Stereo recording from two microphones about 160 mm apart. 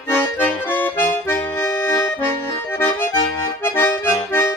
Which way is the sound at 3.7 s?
15° left (ahead or behind).